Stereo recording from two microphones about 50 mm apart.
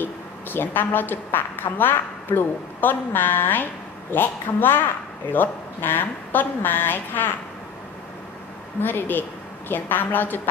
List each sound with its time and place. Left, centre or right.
0.0 s a woman's voice: left
8.8 s a woman's voice: left